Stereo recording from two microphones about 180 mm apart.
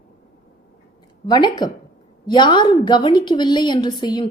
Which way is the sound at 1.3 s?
25° left (ahead or behind).